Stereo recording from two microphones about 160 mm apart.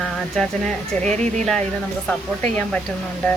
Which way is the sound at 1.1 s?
45° right (ahead or behind).